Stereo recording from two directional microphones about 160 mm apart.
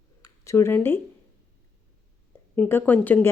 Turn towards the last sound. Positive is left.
turn(degrees=10)  # may be behind; listen again after turning